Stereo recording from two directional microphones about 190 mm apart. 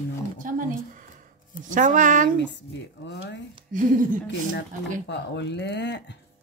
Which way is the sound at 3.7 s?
45° right (ahead or behind).